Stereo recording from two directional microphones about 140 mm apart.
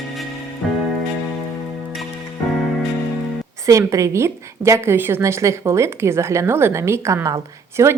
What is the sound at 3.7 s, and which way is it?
A woman's voice, 20° right (ahead or behind).